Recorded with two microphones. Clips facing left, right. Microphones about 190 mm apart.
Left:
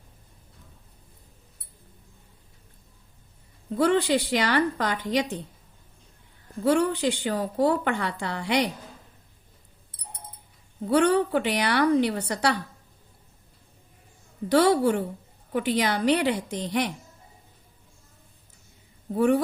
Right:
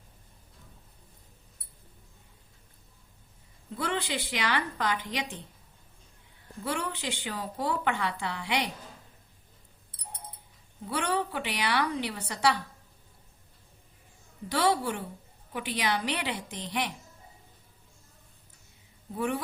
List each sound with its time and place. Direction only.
3.8 s a woman's voice: 45° left (ahead or behind)
6.7 s a woman's voice: 45° left (ahead or behind)
10.8 s a woman's voice: 50° left (ahead or behind)
14.5 s a woman's voice: 45° left (ahead or behind)
19.1 s a woman's voice: 45° left (ahead or behind)